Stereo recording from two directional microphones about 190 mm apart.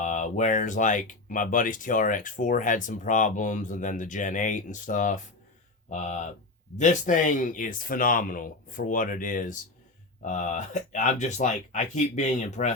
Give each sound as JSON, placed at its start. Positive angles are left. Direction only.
{"t": 0.0, "sound": "speech", "side_deg": 40}